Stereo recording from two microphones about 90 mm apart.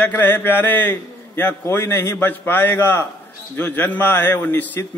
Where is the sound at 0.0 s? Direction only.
20° left (ahead or behind).